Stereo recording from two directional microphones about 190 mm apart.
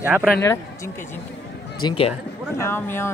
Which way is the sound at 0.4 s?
15° left (ahead or behind).